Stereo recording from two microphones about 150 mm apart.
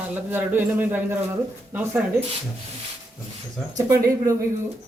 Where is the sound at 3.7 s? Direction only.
20° right (ahead or behind).